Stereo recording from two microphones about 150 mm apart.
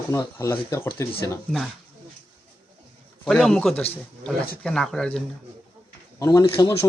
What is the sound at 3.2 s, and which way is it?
Speech, 5° left (ahead or behind).